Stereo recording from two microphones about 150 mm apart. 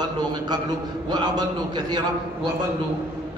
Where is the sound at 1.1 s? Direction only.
30° right (ahead or behind).